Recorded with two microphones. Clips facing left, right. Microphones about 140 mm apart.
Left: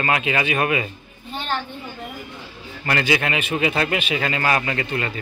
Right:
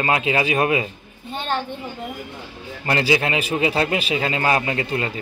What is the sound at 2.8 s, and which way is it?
A man's voice, 25° right (ahead or behind).